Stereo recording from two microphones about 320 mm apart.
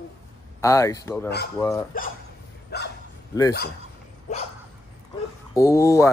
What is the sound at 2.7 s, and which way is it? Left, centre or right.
Bow-wow, left.